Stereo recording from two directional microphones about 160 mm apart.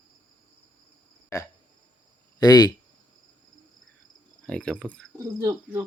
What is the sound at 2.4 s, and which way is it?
Speech, 25° left (ahead or behind).